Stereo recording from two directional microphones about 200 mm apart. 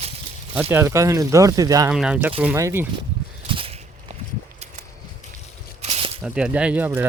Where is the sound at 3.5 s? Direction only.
25° right (ahead or behind).